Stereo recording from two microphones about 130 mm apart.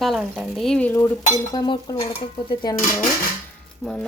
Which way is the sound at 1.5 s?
30° left (ahead or behind).